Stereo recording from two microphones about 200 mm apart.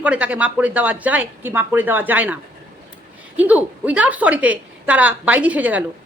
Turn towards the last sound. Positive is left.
turn(degrees=-5)  # may be behind; listen again after turning